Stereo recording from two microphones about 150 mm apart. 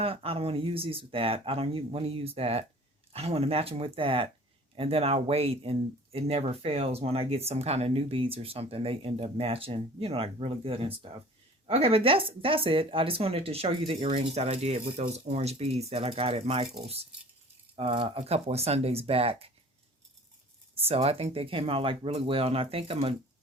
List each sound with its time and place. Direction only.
0.0 s speech: 40° right (ahead or behind)
17.7 s speech: 40° right (ahead or behind)
20.7 s speech: 40° right (ahead or behind)